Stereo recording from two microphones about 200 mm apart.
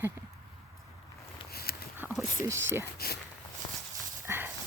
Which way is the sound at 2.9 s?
50° left (ahead or behind).